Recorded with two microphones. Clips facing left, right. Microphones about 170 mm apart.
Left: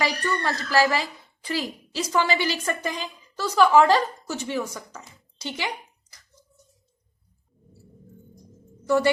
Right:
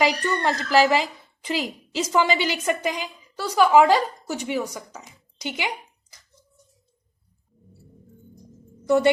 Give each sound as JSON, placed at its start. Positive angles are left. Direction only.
{"t": 0.0, "sound": "a woman's voice", "side_deg": -20}